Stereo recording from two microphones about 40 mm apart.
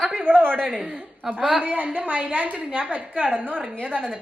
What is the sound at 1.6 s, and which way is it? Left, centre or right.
A woman's voice, right.